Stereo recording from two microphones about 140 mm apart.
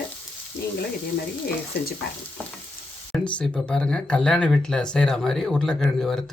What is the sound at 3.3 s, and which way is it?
Speech, 10° left (ahead or behind).